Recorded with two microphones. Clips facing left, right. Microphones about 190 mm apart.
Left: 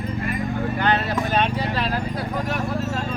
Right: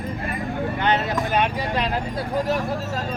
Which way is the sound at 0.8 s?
15° right (ahead or behind).